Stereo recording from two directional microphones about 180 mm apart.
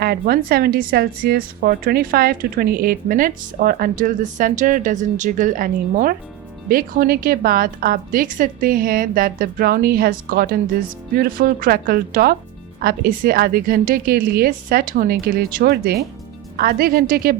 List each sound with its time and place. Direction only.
0.0 s a woman's voice: 60° right (ahead or behind)